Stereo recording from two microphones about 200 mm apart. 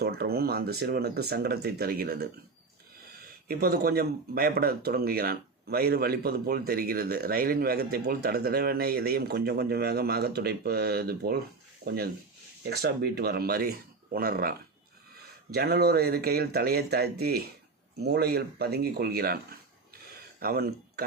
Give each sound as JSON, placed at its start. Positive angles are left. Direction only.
{"t": 0.0, "sound": "speech", "side_deg": -50}
{"t": 15.5, "sound": "speech", "side_deg": -50}
{"t": 20.4, "sound": "speech", "side_deg": -50}